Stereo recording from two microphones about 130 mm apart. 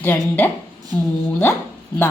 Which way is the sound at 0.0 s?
15° left (ahead or behind).